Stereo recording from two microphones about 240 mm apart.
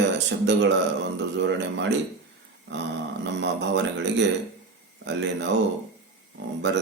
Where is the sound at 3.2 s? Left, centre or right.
Right.